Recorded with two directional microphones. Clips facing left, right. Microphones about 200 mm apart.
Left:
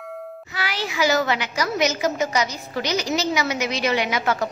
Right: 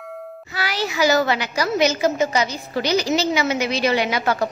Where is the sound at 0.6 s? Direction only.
40° right (ahead or behind).